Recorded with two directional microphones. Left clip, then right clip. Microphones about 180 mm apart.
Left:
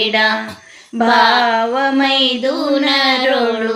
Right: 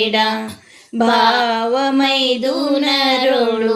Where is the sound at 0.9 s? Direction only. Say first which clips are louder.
Left 2 dB; 40° right (ahead or behind).